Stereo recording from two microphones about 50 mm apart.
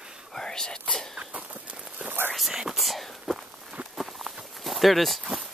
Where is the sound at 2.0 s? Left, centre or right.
Right.